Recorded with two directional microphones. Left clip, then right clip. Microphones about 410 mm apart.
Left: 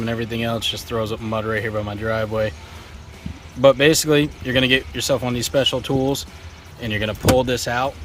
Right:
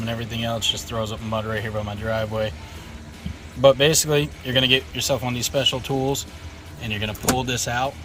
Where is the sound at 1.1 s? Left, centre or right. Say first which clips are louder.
Left 3 dB; left.